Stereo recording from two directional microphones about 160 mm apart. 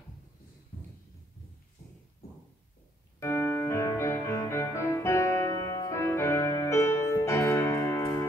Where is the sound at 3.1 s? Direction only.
20° left (ahead or behind).